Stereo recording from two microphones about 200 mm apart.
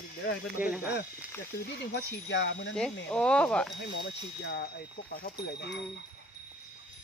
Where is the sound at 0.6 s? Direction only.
5° right (ahead or behind).